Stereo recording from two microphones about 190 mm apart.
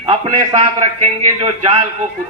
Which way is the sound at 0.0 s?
25° right (ahead or behind).